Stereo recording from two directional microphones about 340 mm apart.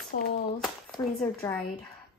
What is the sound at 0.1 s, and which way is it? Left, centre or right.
Speech, left.